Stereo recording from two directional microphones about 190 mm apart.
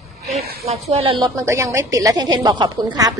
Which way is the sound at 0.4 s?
35° right (ahead or behind).